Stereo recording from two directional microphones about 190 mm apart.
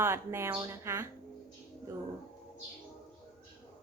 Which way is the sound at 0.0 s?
15° right (ahead or behind).